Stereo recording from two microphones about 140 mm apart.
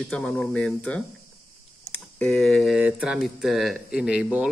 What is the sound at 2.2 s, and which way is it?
Speech, 5° left (ahead or behind).